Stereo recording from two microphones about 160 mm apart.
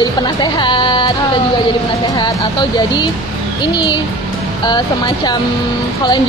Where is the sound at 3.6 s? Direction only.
25° left (ahead or behind).